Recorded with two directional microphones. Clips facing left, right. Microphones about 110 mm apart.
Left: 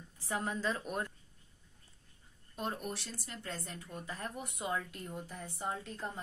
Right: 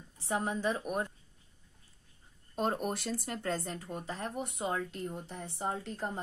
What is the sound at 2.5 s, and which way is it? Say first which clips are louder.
Speech: right 7 dB; 45° right (ahead or behind).